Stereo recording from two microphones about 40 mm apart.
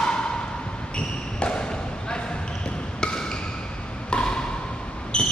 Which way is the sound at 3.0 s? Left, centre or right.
Left.